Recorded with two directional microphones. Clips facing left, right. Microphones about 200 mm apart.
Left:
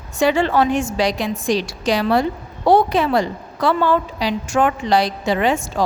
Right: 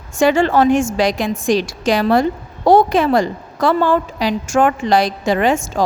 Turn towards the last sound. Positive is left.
turn(degrees=-45)  # may be behind; listen again after turning